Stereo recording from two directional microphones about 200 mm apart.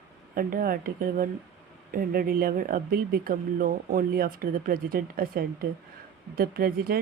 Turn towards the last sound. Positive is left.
turn(degrees=-50)  # may be behind; listen again after turning